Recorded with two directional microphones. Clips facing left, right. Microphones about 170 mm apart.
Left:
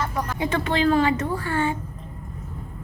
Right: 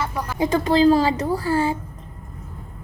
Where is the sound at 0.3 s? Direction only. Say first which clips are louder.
Right 7 dB; 35° right (ahead or behind).